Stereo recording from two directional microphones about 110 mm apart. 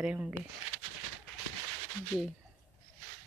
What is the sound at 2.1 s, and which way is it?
Speech, 5° left (ahead or behind).